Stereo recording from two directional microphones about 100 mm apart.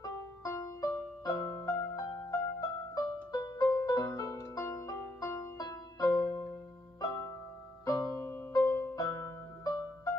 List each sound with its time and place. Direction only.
0.0 s music: 35° left (ahead or behind)
5.6 s music: 40° left (ahead or behind)